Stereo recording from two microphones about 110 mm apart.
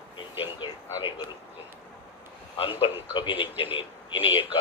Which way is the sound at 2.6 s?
55° left (ahead or behind).